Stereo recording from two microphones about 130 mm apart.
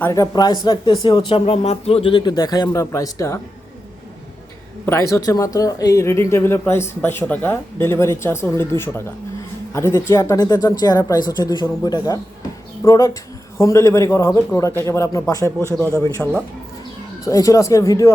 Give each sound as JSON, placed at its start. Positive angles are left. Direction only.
{"t": 0.0, "sound": "speech", "side_deg": 25}
{"t": 1.6, "sound": "speech", "side_deg": 55}
{"t": 4.9, "sound": "speech", "side_deg": 20}
{"t": 16.2, "sound": "speech", "side_deg": 5}
{"t": 17.2, "sound": "speech", "side_deg": 25}